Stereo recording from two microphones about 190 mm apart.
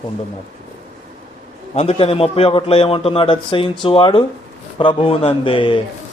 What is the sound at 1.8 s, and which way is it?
Speech, 30° left (ahead or behind).